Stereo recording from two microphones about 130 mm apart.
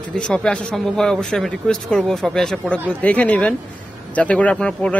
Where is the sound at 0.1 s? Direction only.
5° left (ahead or behind).